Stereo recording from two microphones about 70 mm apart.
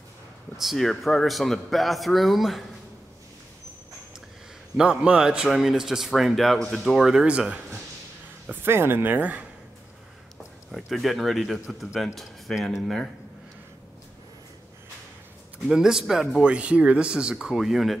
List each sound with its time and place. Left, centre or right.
0.6 s speech: centre
4.7 s speech: centre
8.6 s speech: right
10.9 s speech: centre
15.7 s speech: centre